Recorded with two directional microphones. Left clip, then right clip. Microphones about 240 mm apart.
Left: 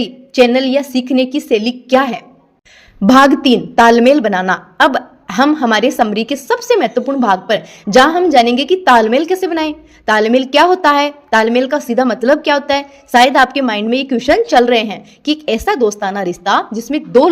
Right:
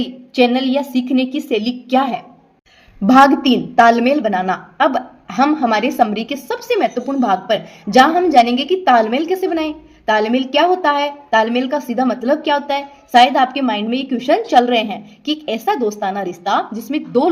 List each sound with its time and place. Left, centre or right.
0.0 s a woman's voice: left